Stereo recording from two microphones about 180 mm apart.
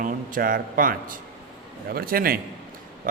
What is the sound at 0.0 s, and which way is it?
A man's voice, 50° right (ahead or behind).